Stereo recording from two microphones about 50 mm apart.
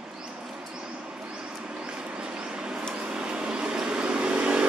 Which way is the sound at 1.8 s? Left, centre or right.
Centre.